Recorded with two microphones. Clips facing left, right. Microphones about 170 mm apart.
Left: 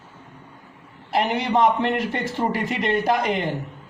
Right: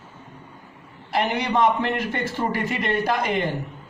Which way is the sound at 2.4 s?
20° left (ahead or behind).